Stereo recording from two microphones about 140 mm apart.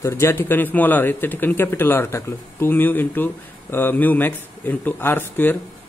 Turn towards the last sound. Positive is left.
turn(degrees=15)  # may be behind; listen again after turning